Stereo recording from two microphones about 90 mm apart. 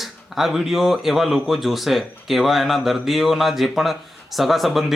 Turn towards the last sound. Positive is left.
turn(degrees=0)  # may be behind; listen again after turning